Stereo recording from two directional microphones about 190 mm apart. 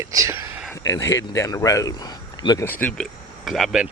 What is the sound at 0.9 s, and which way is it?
Speech, 15° left (ahead or behind).